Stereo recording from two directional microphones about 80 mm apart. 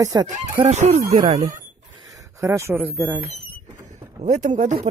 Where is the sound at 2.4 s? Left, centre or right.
Right.